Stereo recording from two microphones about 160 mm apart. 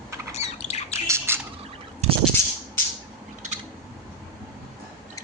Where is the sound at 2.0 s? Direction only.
45° right (ahead or behind).